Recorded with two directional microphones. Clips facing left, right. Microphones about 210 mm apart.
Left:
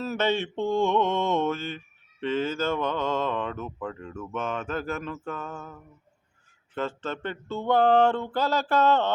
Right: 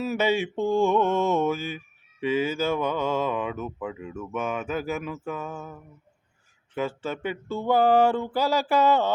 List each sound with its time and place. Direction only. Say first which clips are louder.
0.0 s speech: right 2 dB; 10° right (ahead or behind)
6.7 s speech: right 2 dB; 10° right (ahead or behind)